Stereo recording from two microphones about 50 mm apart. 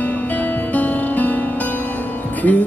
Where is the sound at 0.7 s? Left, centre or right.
Left.